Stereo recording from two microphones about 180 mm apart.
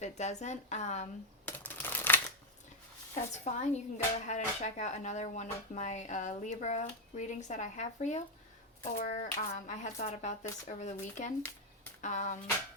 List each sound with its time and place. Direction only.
0.0 s speech: 40° left (ahead or behind)
1.5 s crumpling: 10° left (ahead or behind)
3.2 s speech: 40° left (ahead or behind)